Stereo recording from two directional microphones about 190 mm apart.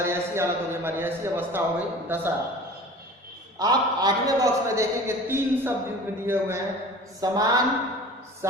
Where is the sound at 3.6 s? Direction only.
20° right (ahead or behind).